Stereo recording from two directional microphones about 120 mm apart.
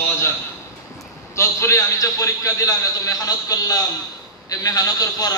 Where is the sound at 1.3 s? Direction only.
25° left (ahead or behind).